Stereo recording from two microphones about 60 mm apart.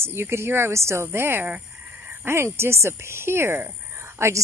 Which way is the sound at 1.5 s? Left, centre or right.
Right.